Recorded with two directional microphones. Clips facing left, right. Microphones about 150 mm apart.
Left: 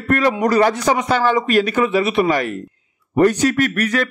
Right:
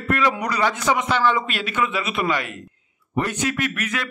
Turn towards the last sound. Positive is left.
turn(degrees=40)  # may be behind; listen again after turning